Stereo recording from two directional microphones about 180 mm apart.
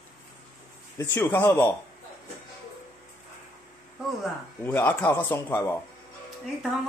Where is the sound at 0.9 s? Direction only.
15° left (ahead or behind).